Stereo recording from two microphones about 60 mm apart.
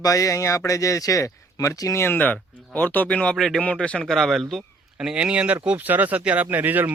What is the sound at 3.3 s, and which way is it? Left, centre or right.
Speech, centre.